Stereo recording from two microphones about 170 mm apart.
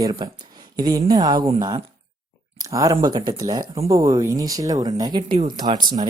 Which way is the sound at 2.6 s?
20° right (ahead or behind).